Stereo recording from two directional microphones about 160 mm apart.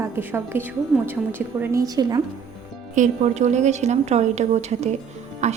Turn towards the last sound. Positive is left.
turn(degrees=-45)  # may be behind; listen again after turning